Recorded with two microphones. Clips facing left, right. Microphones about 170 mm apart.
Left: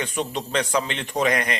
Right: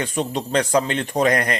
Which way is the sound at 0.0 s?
35° right (ahead or behind).